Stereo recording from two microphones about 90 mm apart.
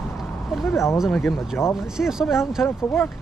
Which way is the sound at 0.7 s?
30° left (ahead or behind).